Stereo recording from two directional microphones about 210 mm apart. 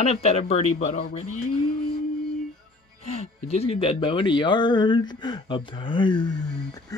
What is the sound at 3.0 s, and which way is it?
Speech, 30° left (ahead or behind).